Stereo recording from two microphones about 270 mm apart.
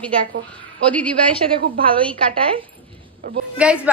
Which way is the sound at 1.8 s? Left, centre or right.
Centre.